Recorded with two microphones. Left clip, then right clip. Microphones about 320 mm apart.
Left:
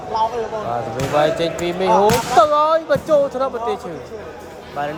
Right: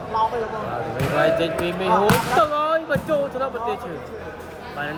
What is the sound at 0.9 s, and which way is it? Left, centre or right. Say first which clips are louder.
Speech: left 2 dB; centre.